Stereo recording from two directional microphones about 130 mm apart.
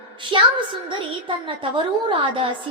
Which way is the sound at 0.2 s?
40° right (ahead or behind).